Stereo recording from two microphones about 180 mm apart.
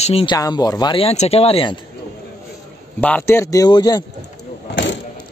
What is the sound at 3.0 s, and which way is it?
Speech, 10° left (ahead or behind).